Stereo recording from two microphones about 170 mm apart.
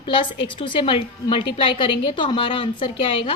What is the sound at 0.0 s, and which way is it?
A woman's voice, 30° left (ahead or behind).